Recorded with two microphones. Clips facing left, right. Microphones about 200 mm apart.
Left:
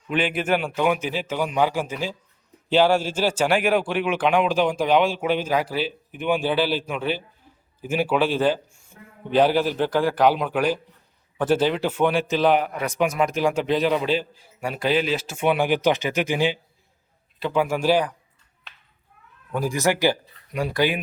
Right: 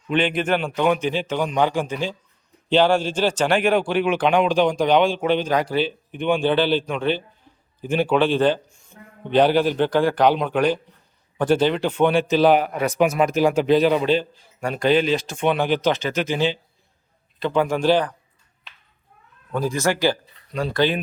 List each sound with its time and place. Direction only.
0.1 s a man's voice: 5° left (ahead or behind)
19.5 s a man's voice: 15° left (ahead or behind)